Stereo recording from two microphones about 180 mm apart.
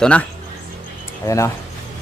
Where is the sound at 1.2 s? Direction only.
15° left (ahead or behind).